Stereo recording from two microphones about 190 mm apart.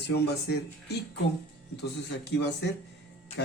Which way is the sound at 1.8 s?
60° left (ahead or behind).